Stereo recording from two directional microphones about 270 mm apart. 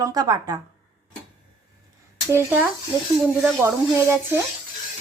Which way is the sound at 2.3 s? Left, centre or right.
Centre.